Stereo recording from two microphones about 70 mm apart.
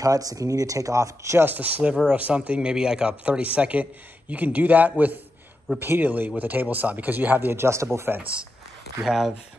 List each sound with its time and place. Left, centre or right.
0.0 s speech: right
1.4 s speech: right
8.2 s speech: centre
9.0 s speech: centre